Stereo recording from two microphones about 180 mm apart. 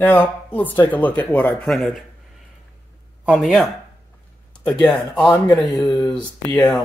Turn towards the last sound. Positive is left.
turn(degrees=5)  # may be behind; listen again after turning